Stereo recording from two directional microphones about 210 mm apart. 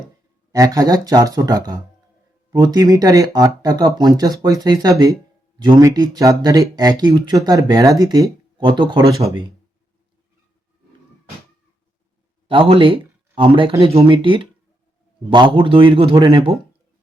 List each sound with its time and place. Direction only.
0.5 s speech: 15° right (ahead or behind)
12.5 s speech: 25° right (ahead or behind)